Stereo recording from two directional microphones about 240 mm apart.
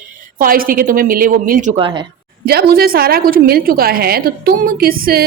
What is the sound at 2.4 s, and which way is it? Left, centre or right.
Speech, right.